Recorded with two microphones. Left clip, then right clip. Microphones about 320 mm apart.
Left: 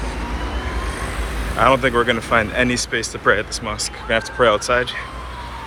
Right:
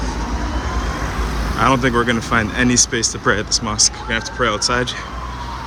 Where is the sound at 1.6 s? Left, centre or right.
Centre.